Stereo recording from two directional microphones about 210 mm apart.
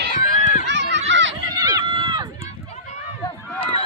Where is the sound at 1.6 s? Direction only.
20° right (ahead or behind).